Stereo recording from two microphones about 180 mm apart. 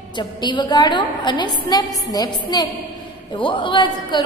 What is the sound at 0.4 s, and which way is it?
A woman's voice, 25° left (ahead or behind).